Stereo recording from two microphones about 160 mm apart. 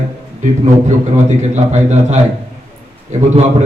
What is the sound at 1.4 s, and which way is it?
A man's voice, 45° right (ahead or behind).